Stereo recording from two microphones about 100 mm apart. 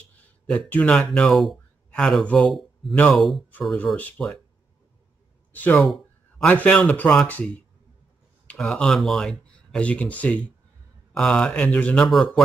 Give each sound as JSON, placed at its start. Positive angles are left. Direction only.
{"t": 0.1, "sound": "a sound", "side_deg": 15}
{"t": 1.1, "sound": "speech", "side_deg": 5}
{"t": 3.2, "sound": "speech", "side_deg": 0}
{"t": 3.7, "sound": "speech", "side_deg": 15}
{"t": 5.5, "sound": "speech", "side_deg": 15}